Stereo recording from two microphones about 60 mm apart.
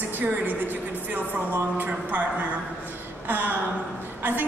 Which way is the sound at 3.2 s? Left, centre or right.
Right.